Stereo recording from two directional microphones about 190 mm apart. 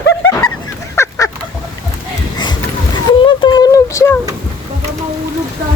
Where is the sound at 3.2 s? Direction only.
25° left (ahead or behind).